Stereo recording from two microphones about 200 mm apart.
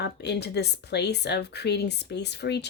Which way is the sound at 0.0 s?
55° left (ahead or behind).